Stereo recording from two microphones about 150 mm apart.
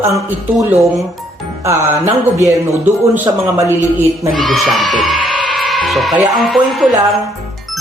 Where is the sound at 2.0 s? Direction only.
50° right (ahead or behind).